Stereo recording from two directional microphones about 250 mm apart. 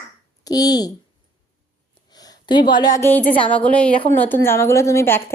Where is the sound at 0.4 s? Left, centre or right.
Centre.